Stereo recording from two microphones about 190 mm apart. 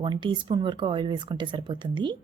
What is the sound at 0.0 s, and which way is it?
Speech, 25° right (ahead or behind).